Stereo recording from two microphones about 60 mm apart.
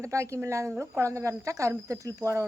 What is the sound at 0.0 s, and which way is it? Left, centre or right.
A woman's voice, right.